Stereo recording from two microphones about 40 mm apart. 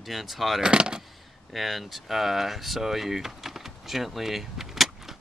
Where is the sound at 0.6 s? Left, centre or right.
Centre.